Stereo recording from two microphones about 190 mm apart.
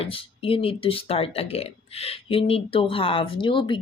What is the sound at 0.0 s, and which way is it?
Speech, 30° left (ahead or behind).